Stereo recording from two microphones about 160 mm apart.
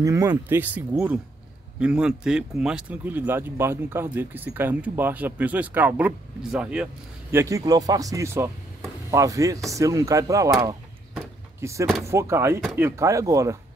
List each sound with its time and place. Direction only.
0.0 s speech: 20° right (ahead or behind)